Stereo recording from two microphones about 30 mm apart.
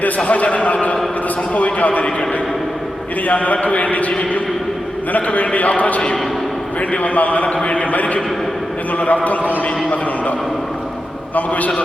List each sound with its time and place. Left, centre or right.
0.3 s a man's voice: left
3.2 s a man's voice: left
5.1 s a man's voice: left
11.3 s a man's voice: left